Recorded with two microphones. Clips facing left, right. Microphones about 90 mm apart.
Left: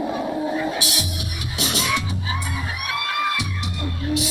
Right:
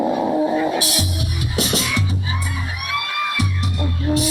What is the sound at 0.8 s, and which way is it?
Music, 40° right (ahead or behind).